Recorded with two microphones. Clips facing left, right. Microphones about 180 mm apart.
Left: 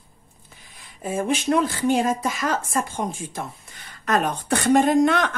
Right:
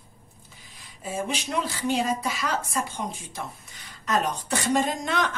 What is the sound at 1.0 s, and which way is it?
Speech, 55° left (ahead or behind).